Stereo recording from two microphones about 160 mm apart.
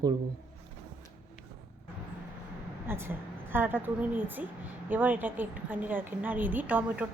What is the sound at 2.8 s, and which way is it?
A woman's voice, 15° right (ahead or behind).